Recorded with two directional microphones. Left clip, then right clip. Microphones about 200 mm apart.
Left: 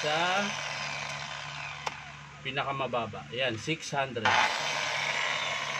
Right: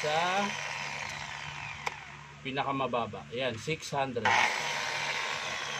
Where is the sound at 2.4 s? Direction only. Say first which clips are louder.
Even; 5° right (ahead or behind).